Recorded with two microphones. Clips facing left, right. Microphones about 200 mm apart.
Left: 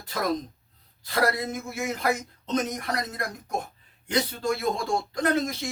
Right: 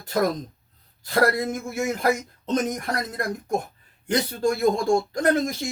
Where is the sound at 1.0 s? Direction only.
50° right (ahead or behind).